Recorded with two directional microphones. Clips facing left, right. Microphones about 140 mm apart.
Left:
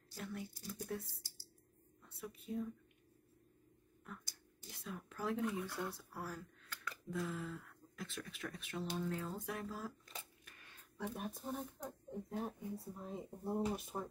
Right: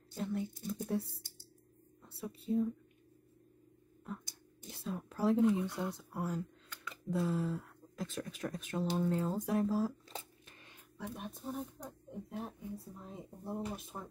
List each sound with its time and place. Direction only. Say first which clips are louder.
0.1 s speech: right 9 dB; 25° right (ahead or behind)
4.0 s a sound: right 8 dB; 25° right (ahead or behind)
7.1 s speech: right 8 dB; 35° right (ahead or behind)
11.0 s speech: even; centre (ahead or behind)
13.9 s speech: left 3 dB; 10° left (ahead or behind)